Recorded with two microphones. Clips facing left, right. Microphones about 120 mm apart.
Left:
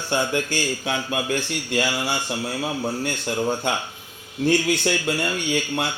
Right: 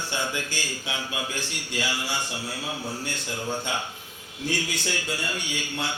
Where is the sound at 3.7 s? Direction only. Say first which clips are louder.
Left 5 dB; 55° left (ahead or behind).